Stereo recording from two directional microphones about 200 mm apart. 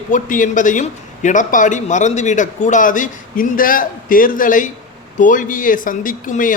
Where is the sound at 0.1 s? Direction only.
40° left (ahead or behind).